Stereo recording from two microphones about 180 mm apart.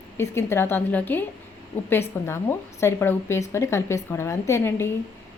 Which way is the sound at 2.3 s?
15° left (ahead or behind).